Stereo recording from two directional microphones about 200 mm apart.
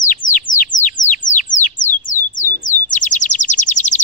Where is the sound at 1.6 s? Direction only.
10° left (ahead or behind).